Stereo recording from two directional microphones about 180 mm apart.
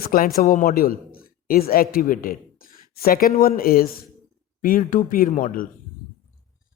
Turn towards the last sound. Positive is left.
turn(degrees=50)  # may be behind; listen again after turning